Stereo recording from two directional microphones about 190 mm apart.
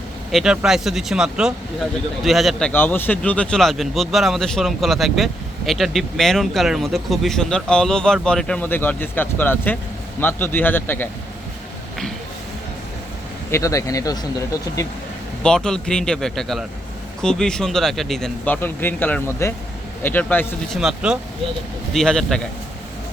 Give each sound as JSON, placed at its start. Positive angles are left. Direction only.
{"t": 0.3, "sound": "speech", "side_deg": 0}
{"t": 13.5, "sound": "speech", "side_deg": 15}
{"t": 15.4, "sound": "speech", "side_deg": 5}
{"t": 20.7, "sound": "speech", "side_deg": 0}